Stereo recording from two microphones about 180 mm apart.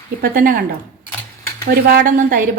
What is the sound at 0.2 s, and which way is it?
A woman's voice, 50° right (ahead or behind).